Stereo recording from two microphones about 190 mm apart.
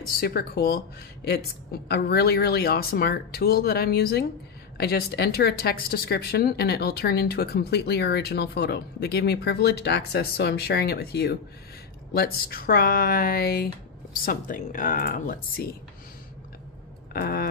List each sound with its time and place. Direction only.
0.2 s speech: 55° left (ahead or behind)
17.1 s speech: 50° left (ahead or behind)